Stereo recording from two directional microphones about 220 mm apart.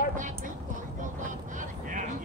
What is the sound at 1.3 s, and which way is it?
Vehicle, 35° right (ahead or behind).